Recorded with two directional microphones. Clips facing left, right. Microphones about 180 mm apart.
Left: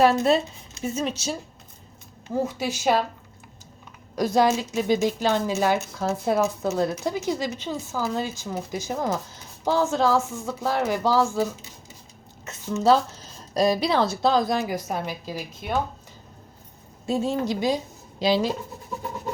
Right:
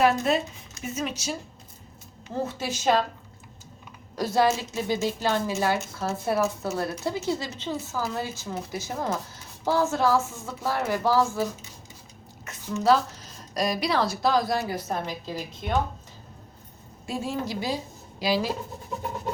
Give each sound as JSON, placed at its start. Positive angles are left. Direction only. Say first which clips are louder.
{"t": 0.0, "sound": "speech", "louder": "left 3 dB", "side_deg": 30}
{"t": 2.3, "sound": "speech", "louder": "left 4 dB", "side_deg": 10}
{"t": 4.1, "sound": "speech", "louder": "left 2 dB", "side_deg": 15}
{"t": 12.5, "sound": "a woman's voice", "louder": "left 2 dB", "side_deg": 25}
{"t": 17.1, "sound": "a woman's voice", "louder": "left 6 dB", "side_deg": 20}